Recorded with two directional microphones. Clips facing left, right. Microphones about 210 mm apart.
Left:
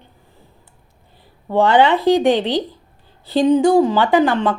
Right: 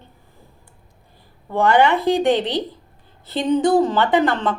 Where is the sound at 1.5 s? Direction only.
20° left (ahead or behind).